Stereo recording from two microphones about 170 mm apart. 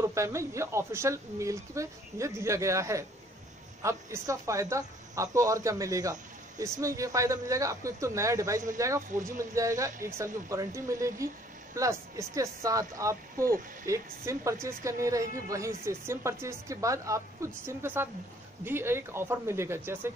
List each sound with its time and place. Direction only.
0.0 s a woman's voice: 15° right (ahead or behind)